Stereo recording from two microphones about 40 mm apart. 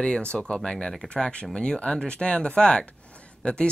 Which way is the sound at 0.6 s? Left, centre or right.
Centre.